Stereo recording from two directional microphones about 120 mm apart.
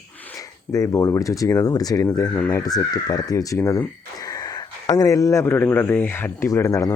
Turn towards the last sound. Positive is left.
turn(degrees=25)  # may be behind; listen again after turning